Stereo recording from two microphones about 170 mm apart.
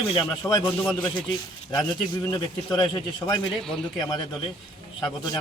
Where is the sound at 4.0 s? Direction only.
25° left (ahead or behind).